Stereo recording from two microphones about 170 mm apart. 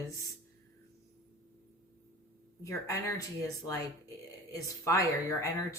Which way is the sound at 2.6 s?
20° left (ahead or behind).